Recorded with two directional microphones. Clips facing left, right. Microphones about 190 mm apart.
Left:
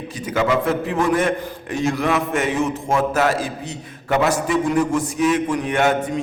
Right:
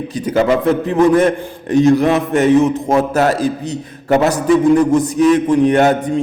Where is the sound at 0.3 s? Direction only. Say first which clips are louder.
Right 6 dB; 35° right (ahead or behind).